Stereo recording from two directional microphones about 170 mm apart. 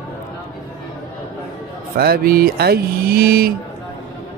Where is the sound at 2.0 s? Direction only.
65° right (ahead or behind).